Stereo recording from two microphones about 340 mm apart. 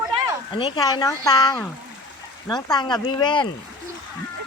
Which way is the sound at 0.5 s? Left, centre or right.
Centre.